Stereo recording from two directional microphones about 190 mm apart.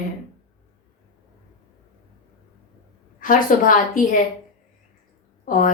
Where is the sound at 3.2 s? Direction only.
45° left (ahead or behind).